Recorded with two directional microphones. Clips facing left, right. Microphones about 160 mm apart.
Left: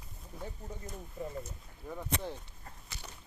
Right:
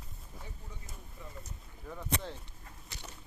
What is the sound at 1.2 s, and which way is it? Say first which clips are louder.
Speech: left 11 dB; 45° left (ahead or behind).